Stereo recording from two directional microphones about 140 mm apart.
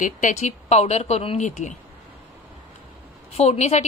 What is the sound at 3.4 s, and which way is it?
Speech, 55° left (ahead or behind).